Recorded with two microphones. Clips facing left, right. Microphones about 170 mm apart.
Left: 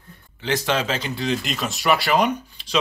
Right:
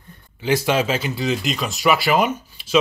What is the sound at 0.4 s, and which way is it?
Speech, 10° right (ahead or behind).